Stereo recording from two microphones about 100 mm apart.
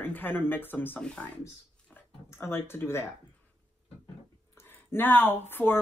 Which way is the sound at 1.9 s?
25° left (ahead or behind).